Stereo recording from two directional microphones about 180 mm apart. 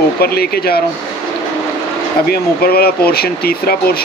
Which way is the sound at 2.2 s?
60° left (ahead or behind).